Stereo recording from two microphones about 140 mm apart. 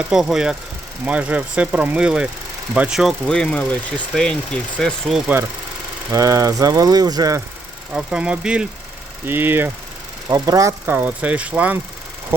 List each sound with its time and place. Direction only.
0.1 s speech: 5° right (ahead or behind)
6.1 s speech: 25° right (ahead or behind)
7.9 s speech: 5° right (ahead or behind)
10.2 s speech: 25° right (ahead or behind); by 11.8 s 10° right (ahead or behind)